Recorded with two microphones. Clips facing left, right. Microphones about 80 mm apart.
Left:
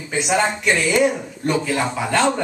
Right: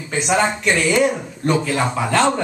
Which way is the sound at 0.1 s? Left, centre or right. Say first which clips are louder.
Right 1 dB; centre.